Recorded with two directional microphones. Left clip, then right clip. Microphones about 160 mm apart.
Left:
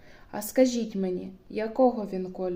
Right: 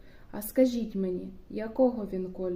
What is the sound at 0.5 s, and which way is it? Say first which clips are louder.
A woman's voice: left 2 dB; 25° right (ahead or behind).